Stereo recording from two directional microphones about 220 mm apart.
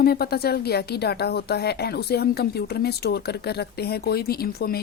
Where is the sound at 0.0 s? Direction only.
45° left (ahead or behind).